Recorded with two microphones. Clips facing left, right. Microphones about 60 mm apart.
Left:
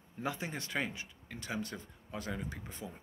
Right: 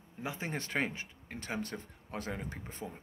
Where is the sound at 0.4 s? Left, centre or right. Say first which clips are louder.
Right 2 dB; right.